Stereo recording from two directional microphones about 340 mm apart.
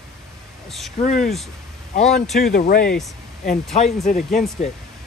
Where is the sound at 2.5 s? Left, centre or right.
Left.